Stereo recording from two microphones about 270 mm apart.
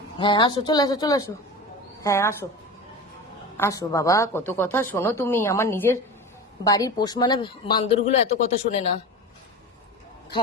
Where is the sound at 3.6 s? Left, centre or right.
Centre.